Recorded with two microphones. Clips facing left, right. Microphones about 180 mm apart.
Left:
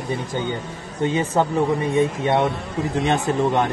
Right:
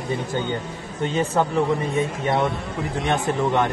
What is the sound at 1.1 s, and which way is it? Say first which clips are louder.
Speech: left 1 dB; 15° left (ahead or behind).